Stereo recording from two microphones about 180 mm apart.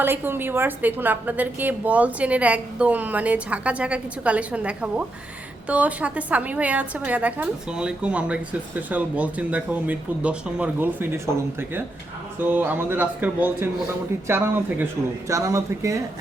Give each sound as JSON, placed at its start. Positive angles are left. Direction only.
{"t": 0.0, "sound": "a woman's voice", "side_deg": -10}
{"t": 12.5, "sound": "a woman's voice", "side_deg": -10}